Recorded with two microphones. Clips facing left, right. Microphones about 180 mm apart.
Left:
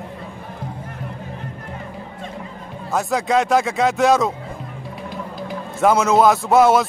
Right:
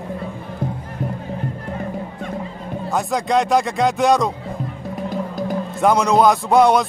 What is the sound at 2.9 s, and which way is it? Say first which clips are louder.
Speech: even; centre (ahead or behind).